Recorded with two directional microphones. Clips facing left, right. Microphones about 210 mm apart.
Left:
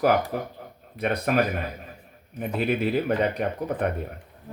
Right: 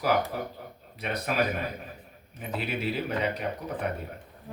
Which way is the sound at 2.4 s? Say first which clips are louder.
Left 7 dB; 55° left (ahead or behind).